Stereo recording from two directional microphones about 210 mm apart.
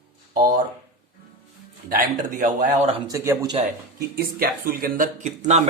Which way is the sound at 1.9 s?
40° right (ahead or behind).